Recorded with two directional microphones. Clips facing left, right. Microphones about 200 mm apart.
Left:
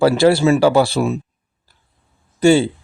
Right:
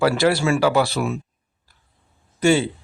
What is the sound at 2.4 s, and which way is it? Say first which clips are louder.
Speech: left 5 dB; 30° left (ahead or behind).